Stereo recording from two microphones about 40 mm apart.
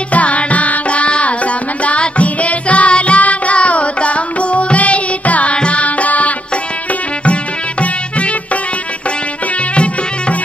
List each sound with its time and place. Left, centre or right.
0.1 s music: left
7.8 s music: left